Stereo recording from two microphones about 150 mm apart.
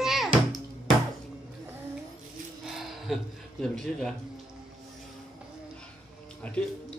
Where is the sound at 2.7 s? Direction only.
Centre (ahead or behind).